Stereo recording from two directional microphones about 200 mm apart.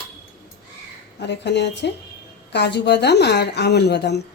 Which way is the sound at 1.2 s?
60° left (ahead or behind).